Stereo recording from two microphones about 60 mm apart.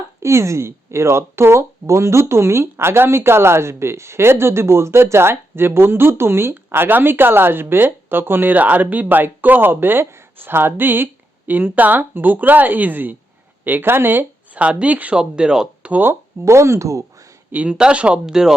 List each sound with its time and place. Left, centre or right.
0.2 s speech: right; by 15.9 s centre
15.9 s speech: right
16.4 s speech: right
17.5 s speech: right